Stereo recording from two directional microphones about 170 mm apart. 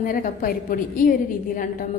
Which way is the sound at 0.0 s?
55° left (ahead or behind).